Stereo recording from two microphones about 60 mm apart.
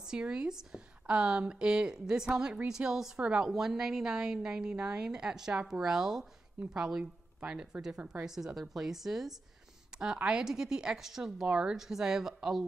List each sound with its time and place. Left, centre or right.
0.1 s a woman's voice: centre
3.4 s a woman's voice: centre
10.1 s a woman's voice: centre
11.4 s a woman's voice: centre